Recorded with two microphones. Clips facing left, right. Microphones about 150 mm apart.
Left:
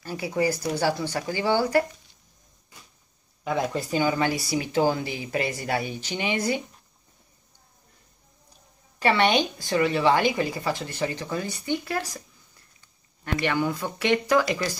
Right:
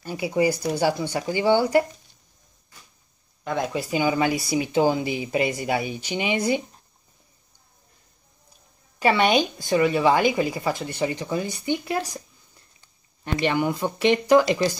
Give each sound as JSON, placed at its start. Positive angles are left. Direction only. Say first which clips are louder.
{"t": 0.0, "sound": "a woman's voice", "louder": "right 3 dB", "side_deg": -15}
{"t": 3.4, "sound": "speech", "louder": "even", "side_deg": 5}
{"t": 3.7, "sound": "a woman's voice", "louder": "right 2 dB", "side_deg": -15}
{"t": 9.0, "sound": "a woman's voice", "louder": "right 2 dB", "side_deg": -15}
{"t": 13.2, "sound": "speech", "louder": "right 2 dB", "side_deg": -20}